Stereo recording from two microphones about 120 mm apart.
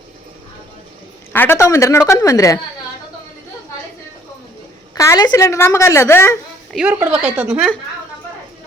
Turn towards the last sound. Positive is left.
turn(degrees=-10)  # may be behind; listen again after turning